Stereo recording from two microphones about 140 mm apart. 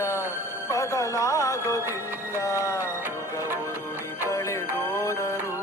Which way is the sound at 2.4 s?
20° left (ahead or behind).